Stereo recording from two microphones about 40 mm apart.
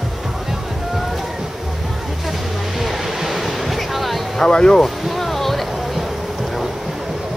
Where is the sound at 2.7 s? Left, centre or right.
Centre.